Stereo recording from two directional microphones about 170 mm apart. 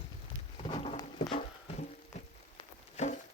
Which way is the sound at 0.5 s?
35° left (ahead or behind).